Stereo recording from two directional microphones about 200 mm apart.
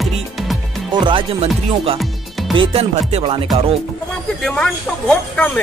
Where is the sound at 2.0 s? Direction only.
Centre (ahead or behind).